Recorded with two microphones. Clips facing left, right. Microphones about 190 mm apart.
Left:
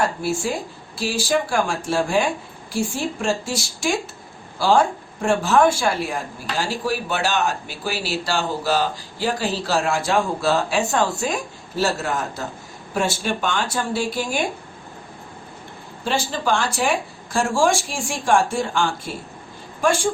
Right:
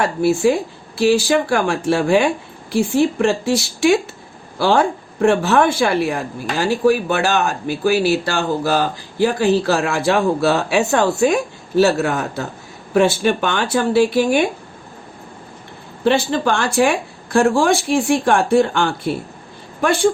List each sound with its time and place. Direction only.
0.2 s speech: 60° right (ahead or behind)
16.0 s speech: 60° right (ahead or behind)